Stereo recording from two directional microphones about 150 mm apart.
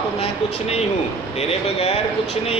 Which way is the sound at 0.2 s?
45° left (ahead or behind).